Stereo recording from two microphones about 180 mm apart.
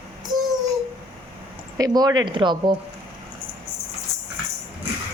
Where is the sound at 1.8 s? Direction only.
20° right (ahead or behind).